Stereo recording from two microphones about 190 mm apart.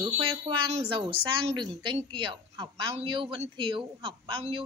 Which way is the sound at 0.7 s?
30° right (ahead or behind).